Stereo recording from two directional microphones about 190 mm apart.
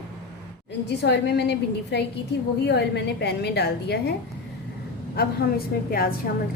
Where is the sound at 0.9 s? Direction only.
60° left (ahead or behind).